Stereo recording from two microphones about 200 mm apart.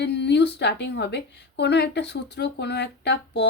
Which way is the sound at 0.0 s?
60° left (ahead or behind).